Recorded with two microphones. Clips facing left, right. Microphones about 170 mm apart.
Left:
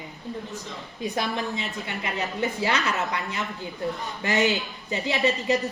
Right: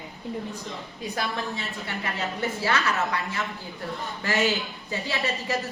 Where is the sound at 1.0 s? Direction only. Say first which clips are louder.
Left 3 dB; 20° left (ahead or behind).